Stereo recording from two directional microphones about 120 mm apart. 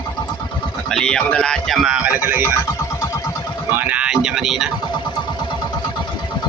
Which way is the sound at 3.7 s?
15° right (ahead or behind).